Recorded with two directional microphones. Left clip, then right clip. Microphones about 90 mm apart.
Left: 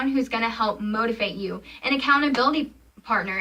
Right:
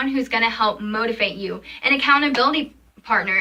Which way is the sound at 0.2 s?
20° left (ahead or behind).